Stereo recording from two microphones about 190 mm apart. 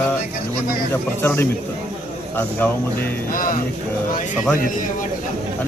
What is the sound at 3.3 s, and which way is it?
Speech, 45° left (ahead or behind).